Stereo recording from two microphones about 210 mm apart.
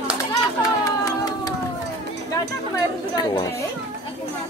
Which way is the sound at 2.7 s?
20° left (ahead or behind).